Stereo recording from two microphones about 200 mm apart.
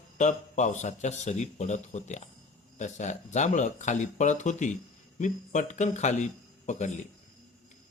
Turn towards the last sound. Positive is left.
turn(degrees=35)  # may be behind; listen again after turning